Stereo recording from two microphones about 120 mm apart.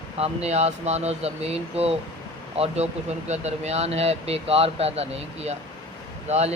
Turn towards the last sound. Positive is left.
turn(degrees=-70)  # may be behind; listen again after turning